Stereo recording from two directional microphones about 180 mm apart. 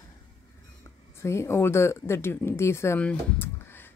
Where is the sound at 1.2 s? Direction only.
15° left (ahead or behind).